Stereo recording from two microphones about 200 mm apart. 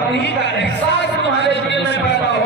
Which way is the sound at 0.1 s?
60° left (ahead or behind).